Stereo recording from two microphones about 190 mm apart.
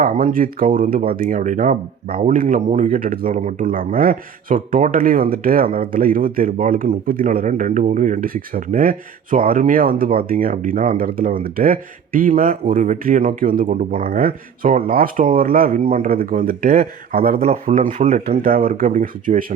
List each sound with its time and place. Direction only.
0.0 s speech: 45° right (ahead or behind)
17.4 s speech: 35° right (ahead or behind)
18.3 s speech: 50° right (ahead or behind)